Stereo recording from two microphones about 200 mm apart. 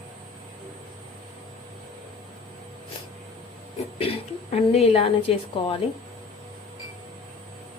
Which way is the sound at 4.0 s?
30° left (ahead or behind).